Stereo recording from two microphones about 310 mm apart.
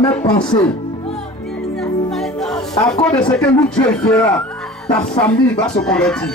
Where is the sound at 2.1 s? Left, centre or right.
Centre.